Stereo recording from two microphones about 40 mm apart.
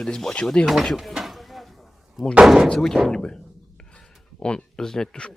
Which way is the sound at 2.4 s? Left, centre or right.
Centre.